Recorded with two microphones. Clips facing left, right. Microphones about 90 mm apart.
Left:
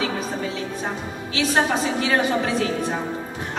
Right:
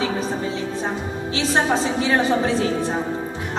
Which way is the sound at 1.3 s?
30° right (ahead or behind).